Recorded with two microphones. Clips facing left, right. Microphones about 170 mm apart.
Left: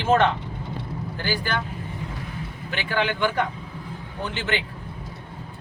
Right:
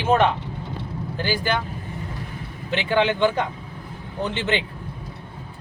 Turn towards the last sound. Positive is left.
turn(degrees=-20)  # may be behind; listen again after turning